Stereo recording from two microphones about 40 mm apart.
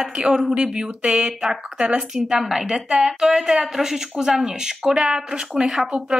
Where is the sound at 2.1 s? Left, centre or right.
Centre.